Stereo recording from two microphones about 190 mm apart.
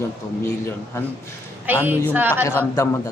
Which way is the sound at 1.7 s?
10° right (ahead or behind).